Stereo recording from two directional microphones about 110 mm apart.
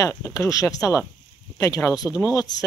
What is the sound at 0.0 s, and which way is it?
Speech, 30° left (ahead or behind).